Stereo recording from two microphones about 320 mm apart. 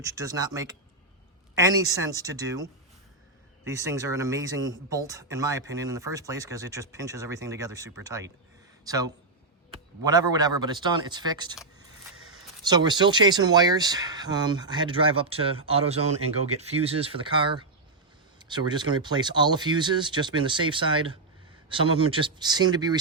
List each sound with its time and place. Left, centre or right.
0.0 s speech: centre
12.6 s speech: centre